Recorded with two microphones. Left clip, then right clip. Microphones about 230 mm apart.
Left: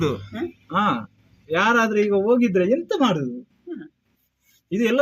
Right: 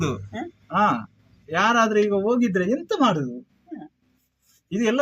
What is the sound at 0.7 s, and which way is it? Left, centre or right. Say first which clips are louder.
Speech: right 1 dB; centre.